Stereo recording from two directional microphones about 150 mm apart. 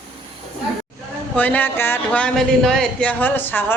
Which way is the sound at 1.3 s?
10° left (ahead or behind).